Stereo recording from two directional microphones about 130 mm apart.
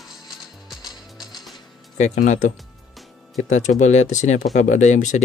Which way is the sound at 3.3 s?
65° left (ahead or behind).